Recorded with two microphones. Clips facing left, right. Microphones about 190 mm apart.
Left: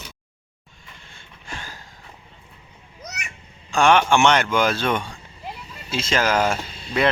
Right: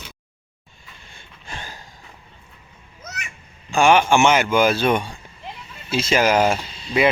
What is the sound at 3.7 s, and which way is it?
Speech, 5° right (ahead or behind).